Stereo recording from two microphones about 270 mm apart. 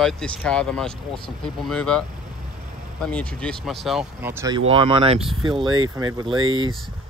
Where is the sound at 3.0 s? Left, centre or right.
Centre.